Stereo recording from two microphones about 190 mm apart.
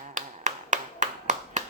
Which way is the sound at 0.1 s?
40° right (ahead or behind).